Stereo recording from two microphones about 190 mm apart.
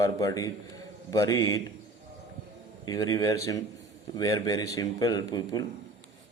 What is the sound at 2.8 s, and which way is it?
Speech, 20° left (ahead or behind).